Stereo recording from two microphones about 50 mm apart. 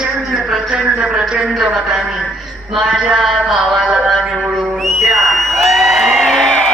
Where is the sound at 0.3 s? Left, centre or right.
Centre.